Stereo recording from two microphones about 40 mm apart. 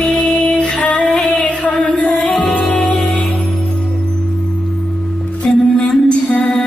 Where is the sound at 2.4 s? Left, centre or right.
Left.